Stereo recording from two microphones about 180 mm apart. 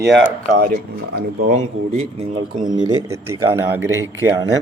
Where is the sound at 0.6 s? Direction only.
50° right (ahead or behind).